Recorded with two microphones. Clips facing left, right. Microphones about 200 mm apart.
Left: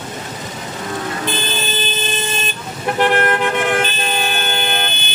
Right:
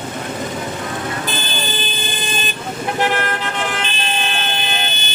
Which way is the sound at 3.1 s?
55° left (ahead or behind).